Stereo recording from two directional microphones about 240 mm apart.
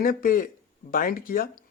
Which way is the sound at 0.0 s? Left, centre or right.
Left.